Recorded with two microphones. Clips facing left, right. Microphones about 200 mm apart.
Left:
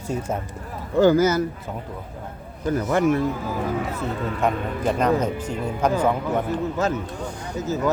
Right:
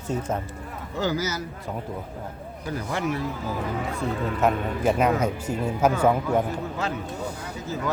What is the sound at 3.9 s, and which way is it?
Speech, centre (ahead or behind).